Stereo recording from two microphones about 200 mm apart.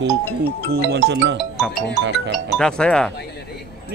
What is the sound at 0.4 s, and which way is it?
Speech, 55° right (ahead or behind).